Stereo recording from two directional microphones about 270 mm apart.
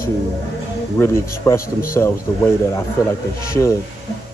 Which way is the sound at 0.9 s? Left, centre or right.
Centre.